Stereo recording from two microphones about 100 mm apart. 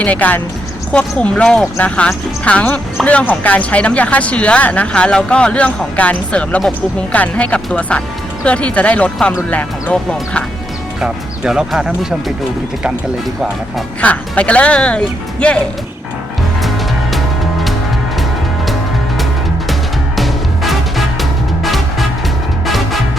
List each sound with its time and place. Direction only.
0.0 s speech: 15° left (ahead or behind)
11.0 s speech: 5° right (ahead or behind)
14.0 s speech: 15° left (ahead or behind)
16.6 s music: centre (ahead or behind)
20.1 s music: centre (ahead or behind)